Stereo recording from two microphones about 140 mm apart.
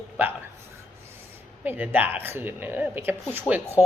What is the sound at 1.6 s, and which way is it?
Speech, 15° right (ahead or behind).